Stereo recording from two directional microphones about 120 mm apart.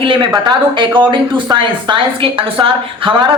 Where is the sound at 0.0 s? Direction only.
45° right (ahead or behind).